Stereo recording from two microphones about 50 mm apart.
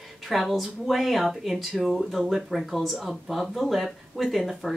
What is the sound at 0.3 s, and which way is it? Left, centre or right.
Speech, centre.